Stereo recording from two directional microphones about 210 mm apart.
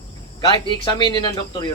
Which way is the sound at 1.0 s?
20° left (ahead or behind).